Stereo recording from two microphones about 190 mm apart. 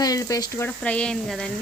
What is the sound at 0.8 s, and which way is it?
Speech, 5° left (ahead or behind).